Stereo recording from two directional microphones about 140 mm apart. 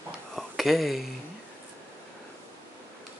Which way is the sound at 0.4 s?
Centre (ahead or behind).